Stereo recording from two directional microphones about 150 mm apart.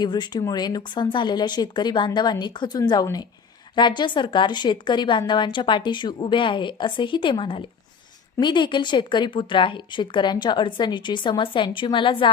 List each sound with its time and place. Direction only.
0.0 s a woman's voice: 30° left (ahead or behind)